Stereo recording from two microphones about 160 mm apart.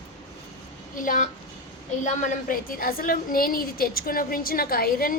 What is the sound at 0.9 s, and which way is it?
A woman's voice, 55° left (ahead or behind).